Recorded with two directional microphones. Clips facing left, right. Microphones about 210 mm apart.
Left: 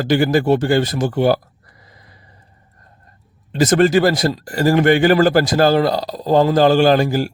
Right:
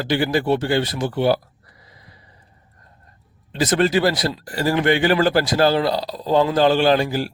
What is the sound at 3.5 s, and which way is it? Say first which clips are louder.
A man's voice: left 5 dB; 45° left (ahead or behind).